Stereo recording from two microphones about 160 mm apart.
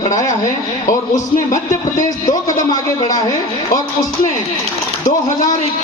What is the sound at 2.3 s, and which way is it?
Speech, 25° left (ahead or behind).